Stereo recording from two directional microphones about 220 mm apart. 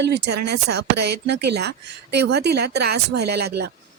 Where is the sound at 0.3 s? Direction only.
50° right (ahead or behind).